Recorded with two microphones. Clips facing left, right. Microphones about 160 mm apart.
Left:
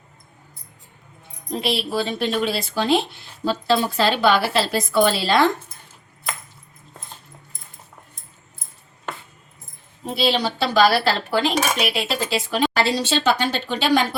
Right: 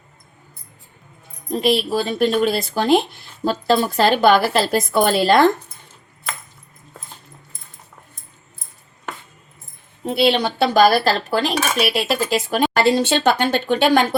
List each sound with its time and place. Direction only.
1.5 s dishes: 45° right (ahead or behind)
10.2 s dishes: 60° right (ahead or behind)